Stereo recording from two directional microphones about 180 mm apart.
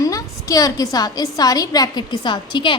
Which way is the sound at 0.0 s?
20° left (ahead or behind).